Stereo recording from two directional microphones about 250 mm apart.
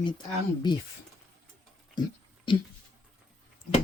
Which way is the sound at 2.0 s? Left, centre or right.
Centre.